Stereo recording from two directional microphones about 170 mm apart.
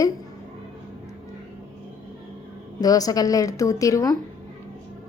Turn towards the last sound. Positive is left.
turn(degrees=20)  # may be behind; listen again after turning